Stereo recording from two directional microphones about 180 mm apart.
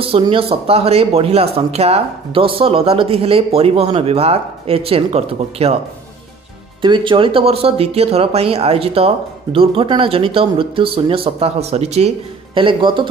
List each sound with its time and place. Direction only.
0.0 s speech: 30° right (ahead or behind)
6.8 s speech: 25° right (ahead or behind)